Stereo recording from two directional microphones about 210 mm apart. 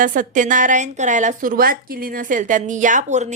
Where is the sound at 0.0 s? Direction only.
40° right (ahead or behind).